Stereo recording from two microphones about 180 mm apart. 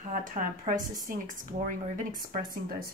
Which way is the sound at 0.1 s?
50° right (ahead or behind).